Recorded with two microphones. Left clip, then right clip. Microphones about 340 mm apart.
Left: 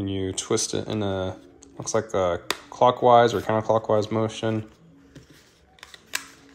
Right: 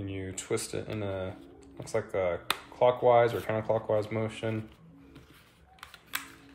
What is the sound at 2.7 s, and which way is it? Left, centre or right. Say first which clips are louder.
Speech: left 6 dB; left.